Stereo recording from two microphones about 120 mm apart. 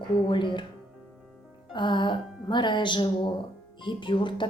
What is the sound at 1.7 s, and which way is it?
A woman's voice, 40° left (ahead or behind).